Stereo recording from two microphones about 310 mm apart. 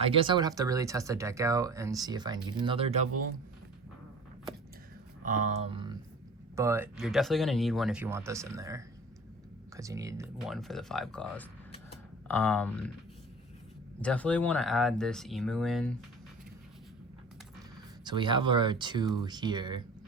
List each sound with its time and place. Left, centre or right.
0.0 s speech: centre
5.2 s speech: right; by 12.9 s centre
14.0 s speech: centre
18.0 s speech: centre